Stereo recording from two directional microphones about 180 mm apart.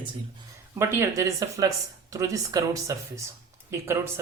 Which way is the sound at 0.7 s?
15° right (ahead or behind).